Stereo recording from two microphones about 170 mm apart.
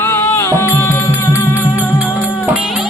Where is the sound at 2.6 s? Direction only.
Centre (ahead or behind).